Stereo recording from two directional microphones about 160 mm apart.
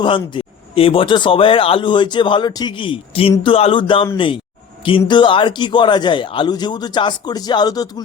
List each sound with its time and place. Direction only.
0.0 s speech: 30° left (ahead or behind)